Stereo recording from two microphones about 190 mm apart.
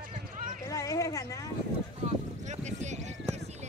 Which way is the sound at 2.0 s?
40° right (ahead or behind).